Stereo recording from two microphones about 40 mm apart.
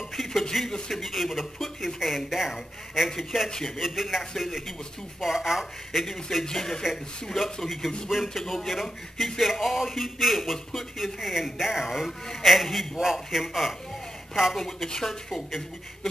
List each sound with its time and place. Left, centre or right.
0.1 s speech: centre
1.0 s speech: centre
3.8 s speech: centre
6.4 s speech: centre